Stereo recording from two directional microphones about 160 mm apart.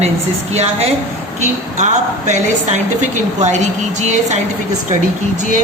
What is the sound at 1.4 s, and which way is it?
Speech, 45° right (ahead or behind).